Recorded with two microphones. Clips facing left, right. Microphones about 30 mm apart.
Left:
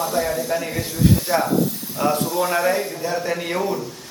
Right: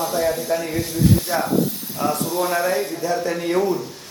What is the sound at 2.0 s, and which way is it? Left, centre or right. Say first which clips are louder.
Speech: left 1 dB; centre.